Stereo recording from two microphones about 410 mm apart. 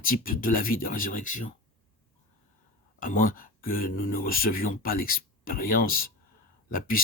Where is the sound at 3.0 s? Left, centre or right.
Centre.